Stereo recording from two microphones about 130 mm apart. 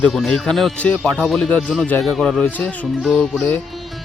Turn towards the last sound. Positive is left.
turn(degrees=0)  # may be behind; listen again after turning